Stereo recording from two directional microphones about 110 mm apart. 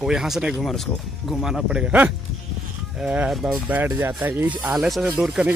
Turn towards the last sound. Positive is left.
turn(degrees=-5)  # may be behind; listen again after turning